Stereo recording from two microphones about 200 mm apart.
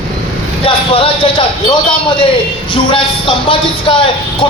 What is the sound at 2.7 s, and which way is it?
Speech, 25° left (ahead or behind).